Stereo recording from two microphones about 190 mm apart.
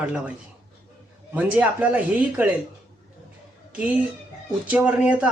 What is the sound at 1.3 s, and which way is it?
Speech, 10° right (ahead or behind).